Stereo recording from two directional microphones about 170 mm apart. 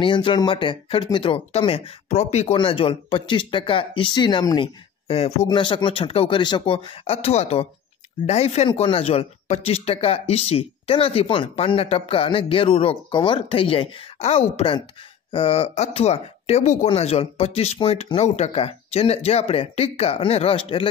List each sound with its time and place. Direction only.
0.0 s speech: 30° left (ahead or behind)